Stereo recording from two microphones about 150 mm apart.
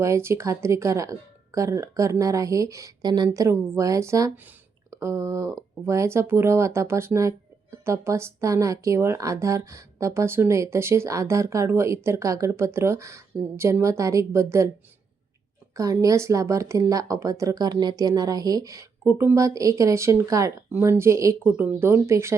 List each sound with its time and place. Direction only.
0.0 s a woman's voice: 20° right (ahead or behind)
15.7 s a woman's voice: 20° right (ahead or behind)